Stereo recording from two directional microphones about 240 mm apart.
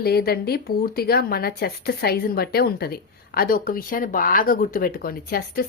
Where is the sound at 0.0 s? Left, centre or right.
Left.